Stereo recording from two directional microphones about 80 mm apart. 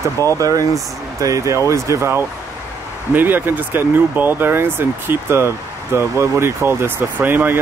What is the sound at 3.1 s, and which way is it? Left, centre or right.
Speech, right.